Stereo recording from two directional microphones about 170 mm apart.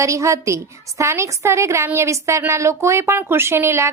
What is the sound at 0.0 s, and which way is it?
A woman's voice, 20° right (ahead or behind).